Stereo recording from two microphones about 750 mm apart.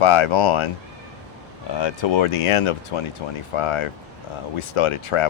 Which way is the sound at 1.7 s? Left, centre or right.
Left.